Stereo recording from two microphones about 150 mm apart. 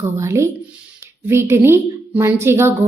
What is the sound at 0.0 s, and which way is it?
A woman's voice, 20° right (ahead or behind).